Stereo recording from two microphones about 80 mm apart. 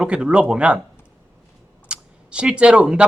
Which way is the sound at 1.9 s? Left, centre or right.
Centre.